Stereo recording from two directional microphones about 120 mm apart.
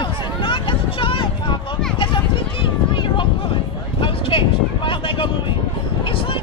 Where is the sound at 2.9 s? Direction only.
40° left (ahead or behind).